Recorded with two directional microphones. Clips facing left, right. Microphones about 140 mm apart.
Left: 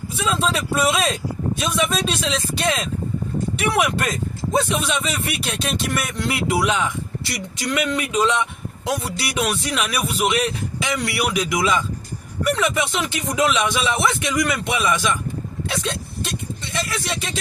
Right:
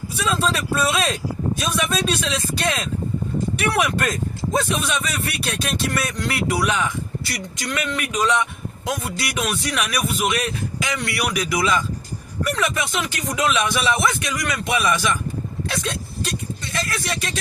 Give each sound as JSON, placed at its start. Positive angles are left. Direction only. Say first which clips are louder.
{"t": 0.3, "sound": "speech", "louder": "even", "side_deg": 20}
{"t": 15.7, "sound": "vehicle", "louder": "left 2 dB", "side_deg": 25}